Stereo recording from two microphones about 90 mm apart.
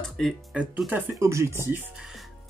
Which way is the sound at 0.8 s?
25° right (ahead or behind).